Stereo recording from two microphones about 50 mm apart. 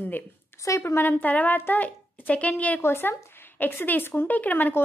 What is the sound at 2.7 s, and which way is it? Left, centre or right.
Speech, left.